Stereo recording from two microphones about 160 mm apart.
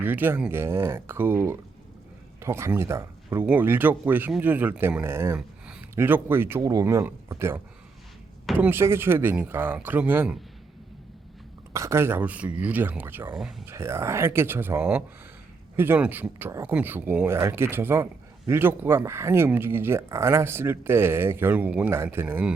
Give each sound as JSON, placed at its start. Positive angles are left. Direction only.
{"t": 0.0, "sound": "speech", "side_deg": -10}
{"t": 5.4, "sound": "a sound", "side_deg": -5}
{"t": 5.9, "sound": "speech", "side_deg": -15}
{"t": 11.7, "sound": "speech", "side_deg": -20}